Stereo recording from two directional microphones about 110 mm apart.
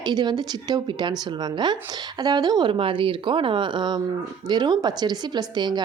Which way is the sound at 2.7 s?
55° right (ahead or behind).